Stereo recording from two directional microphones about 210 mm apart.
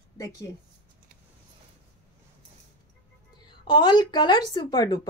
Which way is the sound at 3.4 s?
20° left (ahead or behind).